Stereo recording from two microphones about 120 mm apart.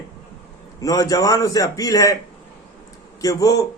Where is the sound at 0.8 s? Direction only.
30° left (ahead or behind).